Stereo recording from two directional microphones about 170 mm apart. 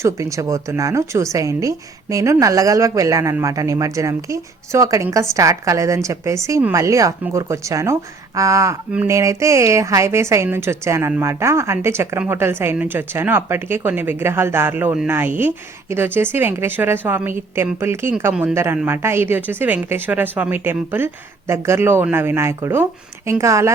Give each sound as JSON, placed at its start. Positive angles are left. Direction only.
{"t": 0.0, "sound": "a woman's voice", "side_deg": -20}